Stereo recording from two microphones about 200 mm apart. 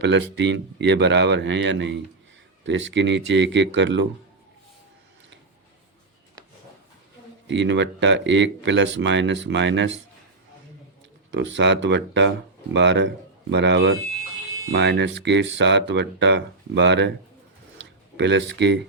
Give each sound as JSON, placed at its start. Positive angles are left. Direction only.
{"t": 0.0, "sound": "speech", "side_deg": -60}
{"t": 7.4, "sound": "speech", "side_deg": -65}
{"t": 11.3, "sound": "speech", "side_deg": -65}
{"t": 18.2, "sound": "speech", "side_deg": -60}